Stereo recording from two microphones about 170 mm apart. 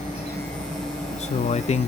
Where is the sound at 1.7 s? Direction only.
40° left (ahead or behind).